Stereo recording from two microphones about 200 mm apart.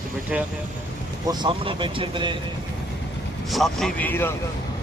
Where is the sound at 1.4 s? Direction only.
25° right (ahead or behind).